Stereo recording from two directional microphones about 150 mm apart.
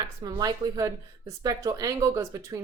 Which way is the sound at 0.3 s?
25° right (ahead or behind).